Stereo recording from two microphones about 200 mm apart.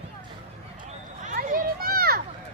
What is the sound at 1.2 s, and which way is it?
Children playing, 45° right (ahead or behind).